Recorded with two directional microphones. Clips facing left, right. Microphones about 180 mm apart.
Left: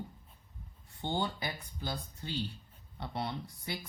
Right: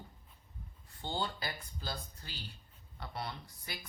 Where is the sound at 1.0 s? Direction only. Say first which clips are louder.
Left 3 dB; 20° left (ahead or behind).